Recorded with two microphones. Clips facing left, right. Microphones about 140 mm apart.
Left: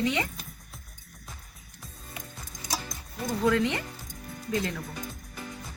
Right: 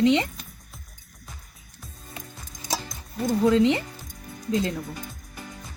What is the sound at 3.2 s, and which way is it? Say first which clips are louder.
Speech: right 6 dB; 20° right (ahead or behind).